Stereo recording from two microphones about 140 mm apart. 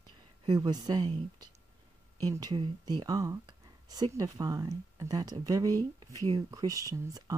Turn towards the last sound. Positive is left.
turn(degrees=-25)  # may be behind; listen again after turning